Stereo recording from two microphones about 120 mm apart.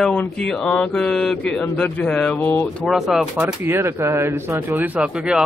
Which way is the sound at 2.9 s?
5° right (ahead or behind).